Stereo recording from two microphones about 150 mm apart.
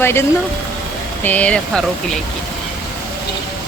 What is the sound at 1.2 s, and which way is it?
Speech, 10° left (ahead or behind).